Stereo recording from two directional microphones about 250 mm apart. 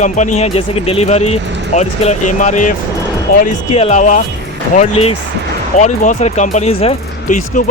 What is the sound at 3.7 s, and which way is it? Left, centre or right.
Speech, left.